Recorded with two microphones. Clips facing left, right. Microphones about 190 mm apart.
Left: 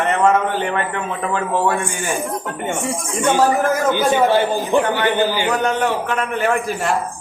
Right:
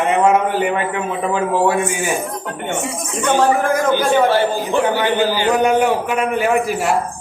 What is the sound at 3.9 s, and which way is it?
A man's voice, 15° left (ahead or behind).